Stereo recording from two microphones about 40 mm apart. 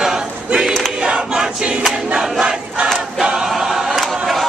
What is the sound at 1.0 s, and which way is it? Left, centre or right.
Choir, centre.